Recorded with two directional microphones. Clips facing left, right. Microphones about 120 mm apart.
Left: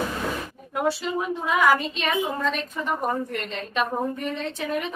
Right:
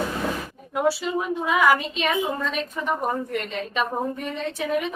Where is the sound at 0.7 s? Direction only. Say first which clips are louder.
Right 2 dB; centre (ahead or behind).